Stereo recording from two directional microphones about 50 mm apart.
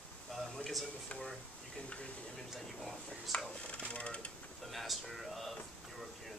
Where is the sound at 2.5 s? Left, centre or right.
Centre.